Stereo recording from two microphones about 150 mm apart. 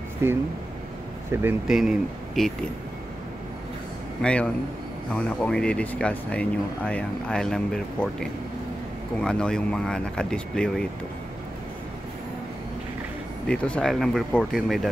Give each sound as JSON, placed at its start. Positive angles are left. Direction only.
{"t": 0.2, "sound": "speech", "side_deg": -15}
{"t": 1.7, "sound": "speech", "side_deg": -5}
{"t": 4.2, "sound": "speech", "side_deg": 5}
{"t": 13.5, "sound": "speech", "side_deg": 5}